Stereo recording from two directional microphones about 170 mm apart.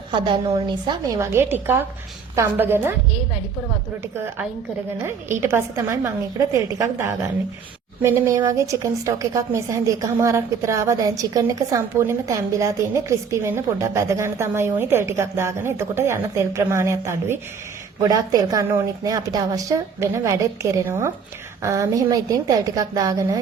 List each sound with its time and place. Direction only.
0.1 s a woman's voice: 25° right (ahead or behind)
4.9 s a woman's voice: 15° right (ahead or behind)